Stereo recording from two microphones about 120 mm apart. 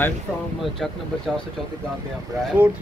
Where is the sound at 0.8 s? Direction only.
5° left (ahead or behind).